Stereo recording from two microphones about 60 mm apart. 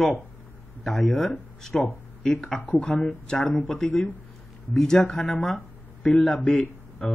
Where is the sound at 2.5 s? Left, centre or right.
Left.